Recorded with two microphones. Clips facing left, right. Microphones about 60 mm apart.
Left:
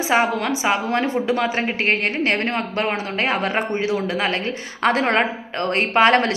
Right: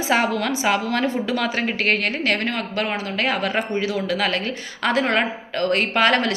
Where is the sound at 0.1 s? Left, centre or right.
Left.